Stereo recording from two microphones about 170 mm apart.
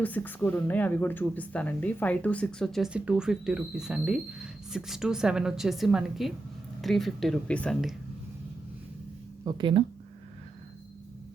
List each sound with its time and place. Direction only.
0.0 s speech: 10° left (ahead or behind)
9.4 s speech: 25° right (ahead or behind)